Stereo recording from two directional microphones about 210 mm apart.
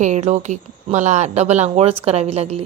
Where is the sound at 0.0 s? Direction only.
35° right (ahead or behind).